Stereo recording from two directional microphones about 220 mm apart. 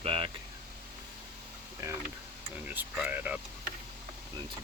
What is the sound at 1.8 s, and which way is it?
Speech, 15° right (ahead or behind).